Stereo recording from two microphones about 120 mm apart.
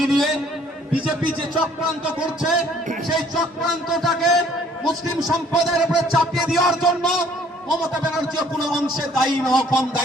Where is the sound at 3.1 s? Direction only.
Centre (ahead or behind).